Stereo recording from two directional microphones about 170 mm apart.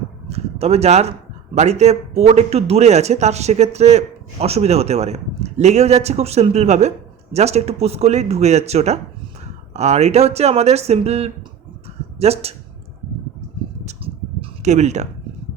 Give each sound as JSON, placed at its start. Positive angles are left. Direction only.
{"t": 0.3, "sound": "speech", "side_deg": -35}
{"t": 14.6, "sound": "speech", "side_deg": -40}